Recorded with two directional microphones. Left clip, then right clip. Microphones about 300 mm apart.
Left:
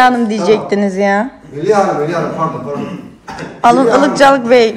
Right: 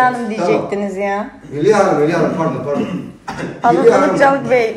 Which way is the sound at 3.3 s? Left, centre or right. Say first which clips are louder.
Right 1 dB; centre.